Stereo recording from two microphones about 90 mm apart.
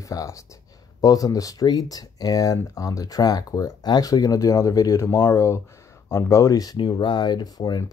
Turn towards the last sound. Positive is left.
turn(degrees=50)  # may be behind; listen again after turning